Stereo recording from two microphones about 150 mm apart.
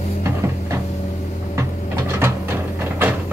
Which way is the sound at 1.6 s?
20° right (ahead or behind).